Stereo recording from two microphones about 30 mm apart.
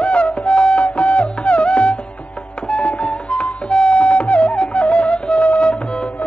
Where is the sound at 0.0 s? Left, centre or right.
Left.